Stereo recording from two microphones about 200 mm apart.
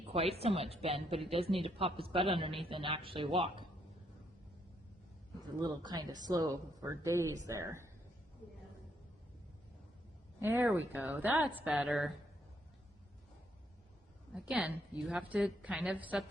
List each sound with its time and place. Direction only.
0.1 s a woman's voice: 30° right (ahead or behind)
5.6 s a woman's voice: 20° right (ahead or behind)
10.4 s a woman's voice: 10° right (ahead or behind)
14.3 s a woman's voice: 5° right (ahead or behind)